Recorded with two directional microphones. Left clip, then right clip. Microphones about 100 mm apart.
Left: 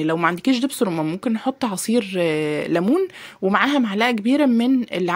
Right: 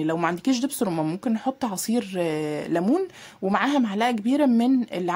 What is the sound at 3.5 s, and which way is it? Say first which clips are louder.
Speech: left 4 dB; 30° left (ahead or behind).